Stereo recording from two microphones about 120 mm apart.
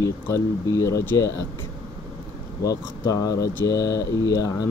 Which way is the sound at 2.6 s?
30° left (ahead or behind).